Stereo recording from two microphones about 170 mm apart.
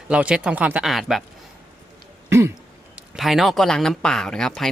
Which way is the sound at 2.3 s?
15° right (ahead or behind).